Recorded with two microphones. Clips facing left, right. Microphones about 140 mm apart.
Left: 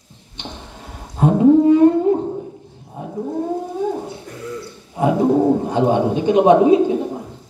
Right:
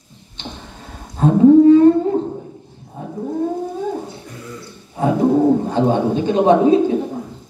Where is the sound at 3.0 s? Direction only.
15° left (ahead or behind).